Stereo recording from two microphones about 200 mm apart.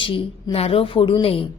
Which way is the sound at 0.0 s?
25° left (ahead or behind).